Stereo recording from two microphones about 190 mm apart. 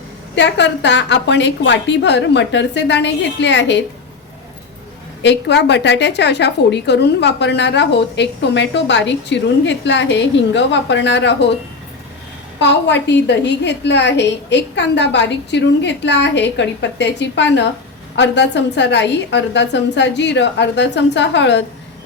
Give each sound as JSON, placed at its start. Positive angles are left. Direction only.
{"t": 0.3, "sound": "a woman's voice", "side_deg": 65}
{"t": 5.2, "sound": "a woman's voice", "side_deg": 65}
{"t": 12.5, "sound": "a woman's voice", "side_deg": 65}